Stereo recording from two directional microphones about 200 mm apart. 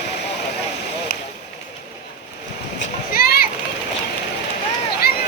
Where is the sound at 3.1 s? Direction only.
50° left (ahead or behind).